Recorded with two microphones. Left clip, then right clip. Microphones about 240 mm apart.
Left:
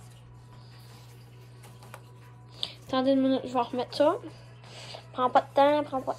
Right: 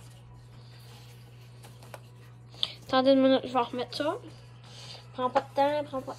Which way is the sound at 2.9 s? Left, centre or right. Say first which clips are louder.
Right 3 dB; right.